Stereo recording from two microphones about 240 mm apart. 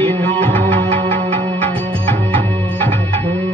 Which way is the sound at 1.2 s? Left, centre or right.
Right.